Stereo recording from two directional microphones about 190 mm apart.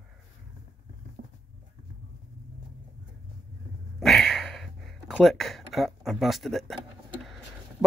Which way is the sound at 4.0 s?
Centre (ahead or behind).